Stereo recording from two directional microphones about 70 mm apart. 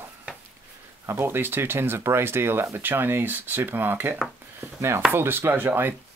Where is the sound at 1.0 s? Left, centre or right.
Right.